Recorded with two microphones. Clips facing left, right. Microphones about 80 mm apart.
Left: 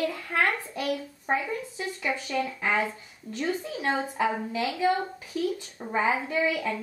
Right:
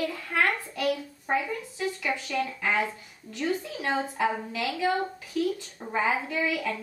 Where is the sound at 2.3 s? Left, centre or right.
Centre.